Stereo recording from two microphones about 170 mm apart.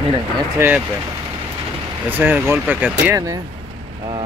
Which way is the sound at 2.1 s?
10° right (ahead or behind).